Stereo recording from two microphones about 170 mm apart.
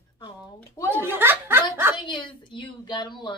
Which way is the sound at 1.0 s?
15° right (ahead or behind).